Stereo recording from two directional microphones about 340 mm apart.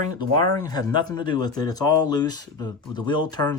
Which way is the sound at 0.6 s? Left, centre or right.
Centre.